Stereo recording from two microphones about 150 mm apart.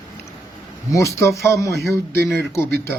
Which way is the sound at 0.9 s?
20° left (ahead or behind).